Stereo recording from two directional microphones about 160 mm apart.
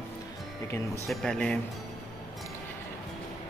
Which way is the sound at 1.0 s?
5° left (ahead or behind).